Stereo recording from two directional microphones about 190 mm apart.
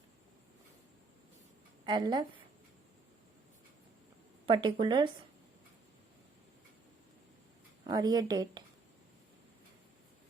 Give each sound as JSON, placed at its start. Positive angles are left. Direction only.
{"t": 1.8, "sound": "a woman's voice", "side_deg": -25}
{"t": 4.4, "sound": "speech", "side_deg": -25}
{"t": 7.9, "sound": "speech", "side_deg": -20}